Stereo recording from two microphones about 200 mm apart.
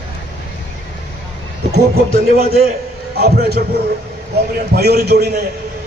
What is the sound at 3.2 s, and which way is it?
A man's voice, 50° right (ahead or behind).